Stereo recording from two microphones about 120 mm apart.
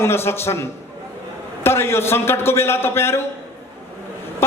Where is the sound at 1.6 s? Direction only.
20° left (ahead or behind).